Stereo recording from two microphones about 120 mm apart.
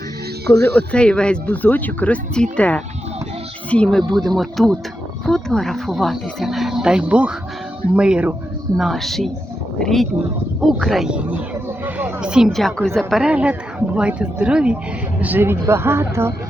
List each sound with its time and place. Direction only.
0.7 s speech: 10° left (ahead or behind); by 8.4 s 10° right (ahead or behind)
8.8 s speech: centre (ahead or behind)
13.3 s speech: 10° right (ahead or behind)